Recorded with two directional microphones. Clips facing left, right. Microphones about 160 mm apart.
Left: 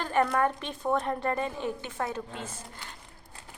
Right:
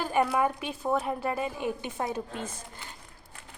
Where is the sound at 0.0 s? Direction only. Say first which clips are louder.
Even; 10° right (ahead or behind).